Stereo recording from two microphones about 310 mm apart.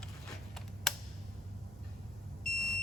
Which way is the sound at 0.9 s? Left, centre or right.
Centre.